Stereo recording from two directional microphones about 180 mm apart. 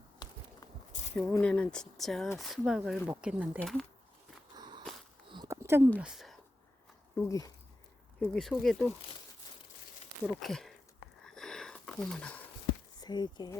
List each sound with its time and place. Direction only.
1.3 s speech: 5° left (ahead or behind)
4.5 s walk: 25° right (ahead or behind)
5.3 s a sound: 20° right (ahead or behind)
6.0 s speech: 5° right (ahead or behind)
7.2 s speech: 15° left (ahead or behind)
8.2 s speech: 5° left (ahead or behind)
10.2 s speech: centre (ahead or behind)
11.2 s a sound: 5° left (ahead or behind)
13.0 s speech: 25° left (ahead or behind)